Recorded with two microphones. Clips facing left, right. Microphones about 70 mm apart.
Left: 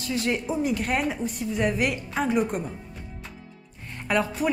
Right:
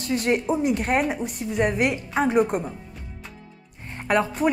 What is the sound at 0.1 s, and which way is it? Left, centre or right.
Speech, right.